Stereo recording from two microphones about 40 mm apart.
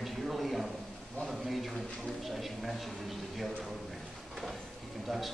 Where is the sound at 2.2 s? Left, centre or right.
Centre.